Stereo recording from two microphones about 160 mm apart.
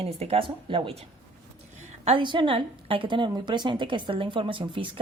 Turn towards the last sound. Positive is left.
turn(degrees=-30)  # may be behind; listen again after turning